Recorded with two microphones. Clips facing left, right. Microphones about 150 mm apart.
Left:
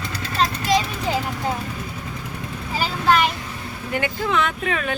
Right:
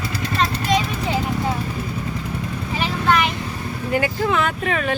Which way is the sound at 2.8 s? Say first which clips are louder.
Left 1 dB; centre (ahead or behind).